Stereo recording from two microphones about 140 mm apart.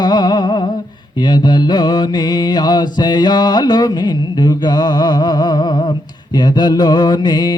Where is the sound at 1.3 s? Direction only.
30° left (ahead or behind).